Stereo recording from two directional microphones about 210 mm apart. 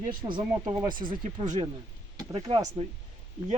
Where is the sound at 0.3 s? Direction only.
20° right (ahead or behind).